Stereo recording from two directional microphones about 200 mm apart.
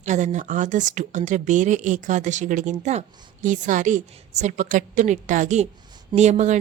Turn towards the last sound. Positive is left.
turn(degrees=-35)  # may be behind; listen again after turning